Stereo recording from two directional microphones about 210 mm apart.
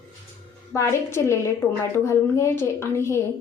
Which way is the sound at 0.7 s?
15° left (ahead or behind).